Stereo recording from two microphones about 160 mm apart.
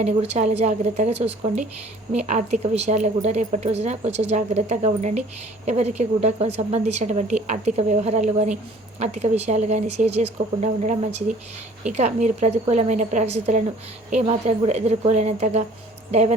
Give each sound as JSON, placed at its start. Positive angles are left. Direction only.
{"t": 0.0, "sound": "a woman's voice", "side_deg": -45}